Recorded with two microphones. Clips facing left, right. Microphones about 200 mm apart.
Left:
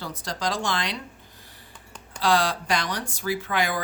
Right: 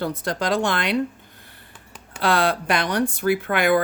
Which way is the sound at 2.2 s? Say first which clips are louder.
Right 2 dB; 60° right (ahead or behind).